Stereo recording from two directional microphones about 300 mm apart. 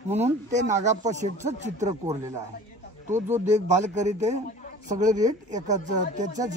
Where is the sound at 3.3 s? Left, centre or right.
Right.